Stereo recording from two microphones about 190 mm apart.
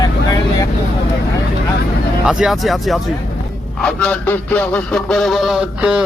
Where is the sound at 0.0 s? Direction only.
20° left (ahead or behind).